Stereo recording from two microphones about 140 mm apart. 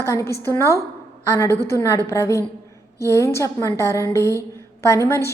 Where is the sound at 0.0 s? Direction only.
20° left (ahead or behind).